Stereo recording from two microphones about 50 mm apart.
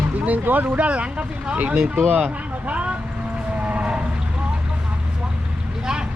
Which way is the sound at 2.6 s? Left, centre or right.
Right.